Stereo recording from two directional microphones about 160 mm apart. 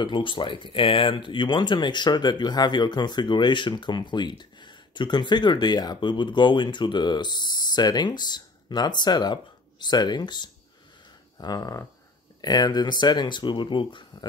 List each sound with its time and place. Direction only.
0.0 s speech: 30° left (ahead or behind)